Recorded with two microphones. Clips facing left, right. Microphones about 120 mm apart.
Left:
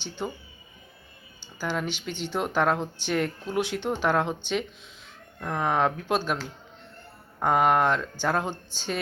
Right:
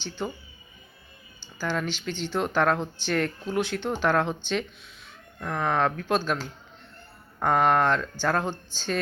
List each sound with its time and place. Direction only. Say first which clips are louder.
0.2 s speech: even; 10° left (ahead or behind)
1.5 s speech: right 1 dB; 15° left (ahead or behind)